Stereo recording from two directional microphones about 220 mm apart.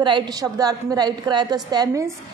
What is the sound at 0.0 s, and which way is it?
A woman's voice, 20° right (ahead or behind).